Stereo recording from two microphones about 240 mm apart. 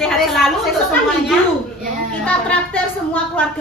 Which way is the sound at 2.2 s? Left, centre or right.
Centre.